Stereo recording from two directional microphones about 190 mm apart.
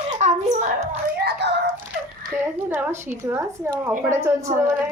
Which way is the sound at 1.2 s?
60° right (ahead or behind).